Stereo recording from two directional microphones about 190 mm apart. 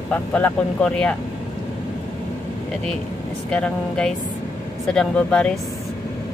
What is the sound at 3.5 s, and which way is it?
Speech, 5° left (ahead or behind).